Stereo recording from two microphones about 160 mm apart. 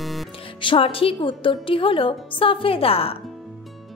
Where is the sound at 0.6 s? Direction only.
35° left (ahead or behind).